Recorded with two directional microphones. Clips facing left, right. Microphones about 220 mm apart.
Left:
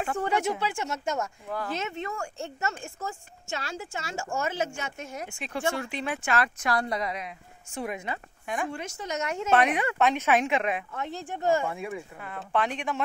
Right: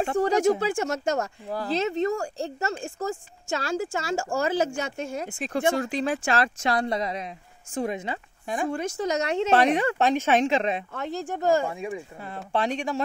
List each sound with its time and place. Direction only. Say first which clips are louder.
0.0 s speech: right 6 dB; 35° right (ahead or behind)
1.0 s speech: right 4 dB; 35° right (ahead or behind)